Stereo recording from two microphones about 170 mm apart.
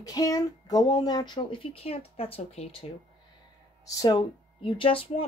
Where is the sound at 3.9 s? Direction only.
20° left (ahead or behind).